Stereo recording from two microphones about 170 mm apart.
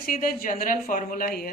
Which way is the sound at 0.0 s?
55° left (ahead or behind).